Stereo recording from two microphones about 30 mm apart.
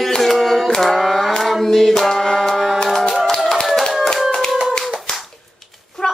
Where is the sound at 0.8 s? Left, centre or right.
Centre.